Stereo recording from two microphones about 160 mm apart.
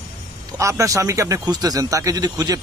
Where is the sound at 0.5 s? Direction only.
20° right (ahead or behind).